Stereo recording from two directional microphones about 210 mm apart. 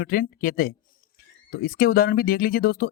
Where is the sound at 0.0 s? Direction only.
45° left (ahead or behind).